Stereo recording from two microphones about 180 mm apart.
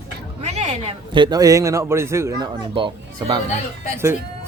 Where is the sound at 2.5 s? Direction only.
25° right (ahead or behind).